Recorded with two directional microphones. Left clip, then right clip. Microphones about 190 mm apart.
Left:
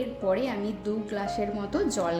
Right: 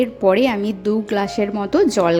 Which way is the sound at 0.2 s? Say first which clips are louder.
Right 11 dB; 45° right (ahead or behind).